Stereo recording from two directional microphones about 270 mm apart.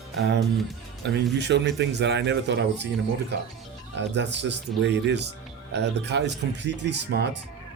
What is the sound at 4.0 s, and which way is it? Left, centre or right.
Speech, right.